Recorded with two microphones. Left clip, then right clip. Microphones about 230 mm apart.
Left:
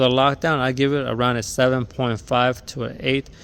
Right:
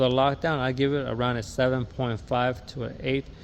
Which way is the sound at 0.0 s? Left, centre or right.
Left.